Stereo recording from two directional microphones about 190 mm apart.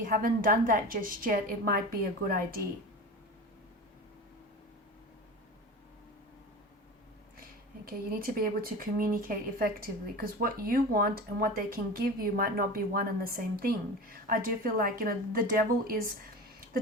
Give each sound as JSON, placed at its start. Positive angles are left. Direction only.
{"t": 0.0, "sound": "speech", "side_deg": -45}
{"t": 7.9, "sound": "speech", "side_deg": -50}